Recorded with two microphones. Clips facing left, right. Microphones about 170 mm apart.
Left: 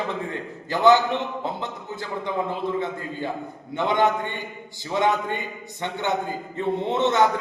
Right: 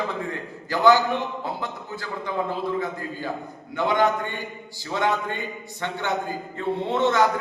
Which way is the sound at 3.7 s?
20° left (ahead or behind).